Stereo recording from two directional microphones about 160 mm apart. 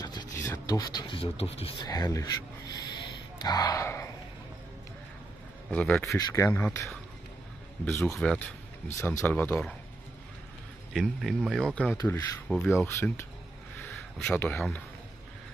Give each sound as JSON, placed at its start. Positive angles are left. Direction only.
{"t": 0.0, "sound": "speech", "side_deg": 25}
{"t": 1.9, "sound": "speech", "side_deg": 25}
{"t": 5.7, "sound": "speech", "side_deg": 10}
{"t": 6.1, "sound": "speech", "side_deg": 20}
{"t": 8.1, "sound": "speech", "side_deg": 5}
{"t": 10.9, "sound": "speech", "side_deg": 0}